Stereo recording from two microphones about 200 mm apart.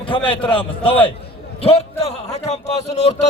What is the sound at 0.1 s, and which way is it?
A man's voice, 25° left (ahead or behind).